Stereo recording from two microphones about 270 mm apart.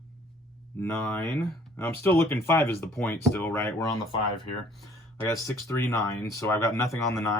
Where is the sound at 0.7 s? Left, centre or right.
Centre.